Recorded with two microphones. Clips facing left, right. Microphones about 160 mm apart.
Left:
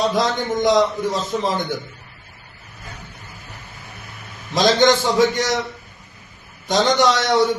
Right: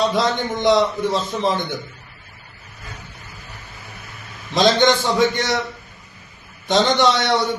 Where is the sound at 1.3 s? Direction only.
Centre (ahead or behind).